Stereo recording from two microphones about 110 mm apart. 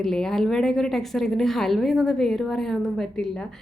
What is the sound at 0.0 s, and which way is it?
A woman's voice, 5° left (ahead or behind).